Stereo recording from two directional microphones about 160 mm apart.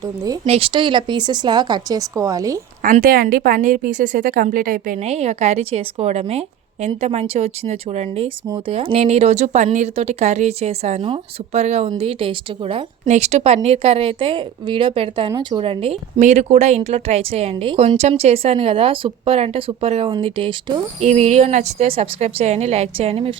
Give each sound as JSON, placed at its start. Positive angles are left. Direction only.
{"t": 0.0, "sound": "a woman's voice", "side_deg": -25}
{"t": 0.4, "sound": "a woman's voice", "side_deg": -35}
{"t": 2.8, "sound": "a woman's voice", "side_deg": -60}
{"t": 4.9, "sound": "speech", "side_deg": -40}
{"t": 8.4, "sound": "a woman's voice", "side_deg": -25}
{"t": 8.7, "sound": "speech", "side_deg": -35}
{"t": 13.1, "sound": "speech", "side_deg": -45}
{"t": 16.2, "sound": "speech", "side_deg": -45}
{"t": 21.0, "sound": "speech", "side_deg": -45}